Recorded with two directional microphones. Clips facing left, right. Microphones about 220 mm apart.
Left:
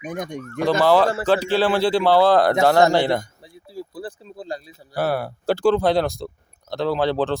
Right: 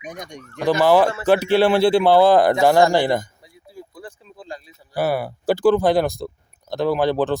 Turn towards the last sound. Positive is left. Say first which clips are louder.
# right 2 dB
turn(degrees=-15)  # may be behind; listen again after turning